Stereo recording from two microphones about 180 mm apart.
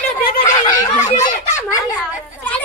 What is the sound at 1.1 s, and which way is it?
Speech, 40° left (ahead or behind).